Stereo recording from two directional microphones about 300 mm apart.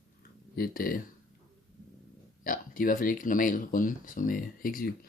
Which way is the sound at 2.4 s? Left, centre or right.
Left.